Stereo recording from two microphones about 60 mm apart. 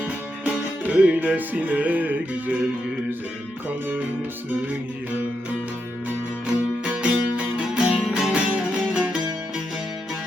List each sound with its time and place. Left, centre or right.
0.9 s music: right
7.0 s music: centre